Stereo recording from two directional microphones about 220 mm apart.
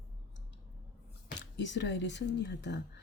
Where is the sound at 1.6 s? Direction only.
55° left (ahead or behind).